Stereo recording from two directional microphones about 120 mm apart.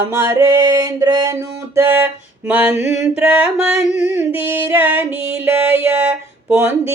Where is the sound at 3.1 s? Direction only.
10° right (ahead or behind).